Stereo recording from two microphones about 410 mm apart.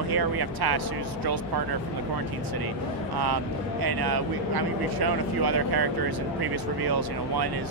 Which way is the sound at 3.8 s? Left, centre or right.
Right.